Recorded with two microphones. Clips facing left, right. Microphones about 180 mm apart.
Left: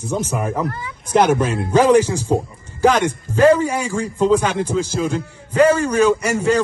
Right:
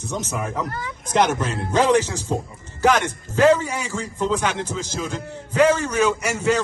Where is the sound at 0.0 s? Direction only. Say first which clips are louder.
Left 5 dB; 10° left (ahead or behind).